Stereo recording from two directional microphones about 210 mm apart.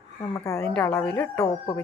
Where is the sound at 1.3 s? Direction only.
25° left (ahead or behind).